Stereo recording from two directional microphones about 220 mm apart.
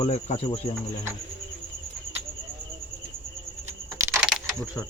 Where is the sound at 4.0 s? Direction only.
5° right (ahead or behind).